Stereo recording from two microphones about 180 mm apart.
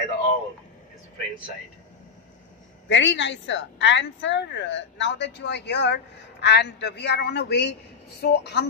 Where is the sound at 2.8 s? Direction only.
90° left.